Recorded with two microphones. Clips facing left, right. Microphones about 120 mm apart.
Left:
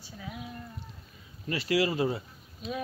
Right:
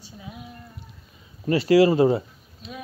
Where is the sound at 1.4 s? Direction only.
35° right (ahead or behind).